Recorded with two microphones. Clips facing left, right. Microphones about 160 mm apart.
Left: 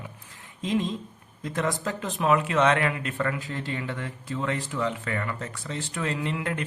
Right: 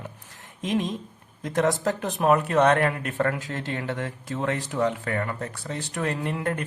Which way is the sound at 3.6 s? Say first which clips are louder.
Right 3 dB; 55° right (ahead or behind).